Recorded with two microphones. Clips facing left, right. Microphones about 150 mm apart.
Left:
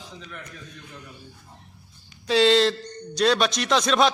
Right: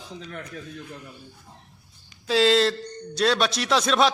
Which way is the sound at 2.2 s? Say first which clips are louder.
Left 1 dB; centre (ahead or behind).